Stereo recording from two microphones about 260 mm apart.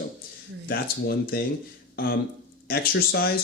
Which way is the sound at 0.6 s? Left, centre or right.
Left.